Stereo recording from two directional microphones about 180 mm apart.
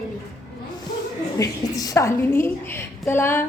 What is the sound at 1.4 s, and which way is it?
A woman's voice, 20° left (ahead or behind).